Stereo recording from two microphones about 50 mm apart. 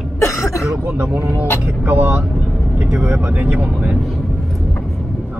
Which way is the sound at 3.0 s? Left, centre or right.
Right.